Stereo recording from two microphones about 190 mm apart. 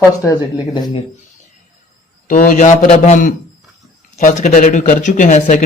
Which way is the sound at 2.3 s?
45° left (ahead or behind).